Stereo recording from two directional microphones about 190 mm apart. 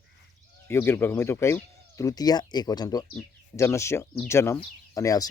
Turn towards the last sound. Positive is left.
turn(degrees=20)  # may be behind; listen again after turning